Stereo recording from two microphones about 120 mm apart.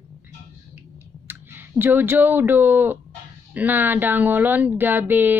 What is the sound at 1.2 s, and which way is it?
Speech, 15° right (ahead or behind).